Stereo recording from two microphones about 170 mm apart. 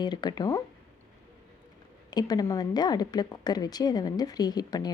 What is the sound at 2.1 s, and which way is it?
A woman's voice, 20° left (ahead or behind).